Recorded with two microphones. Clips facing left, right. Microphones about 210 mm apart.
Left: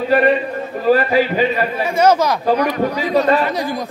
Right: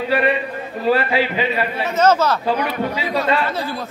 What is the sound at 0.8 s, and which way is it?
Speech, 45° left (ahead or behind).